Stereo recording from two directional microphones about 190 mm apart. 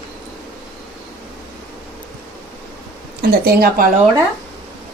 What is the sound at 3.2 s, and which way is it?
Speech, 55° right (ahead or behind).